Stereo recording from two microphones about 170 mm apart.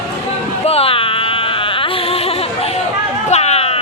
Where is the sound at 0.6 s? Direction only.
35° left (ahead or behind).